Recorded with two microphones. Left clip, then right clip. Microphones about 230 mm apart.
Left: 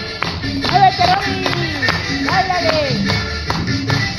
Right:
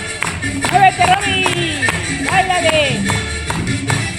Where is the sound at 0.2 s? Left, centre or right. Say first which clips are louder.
Right 1 dB; right.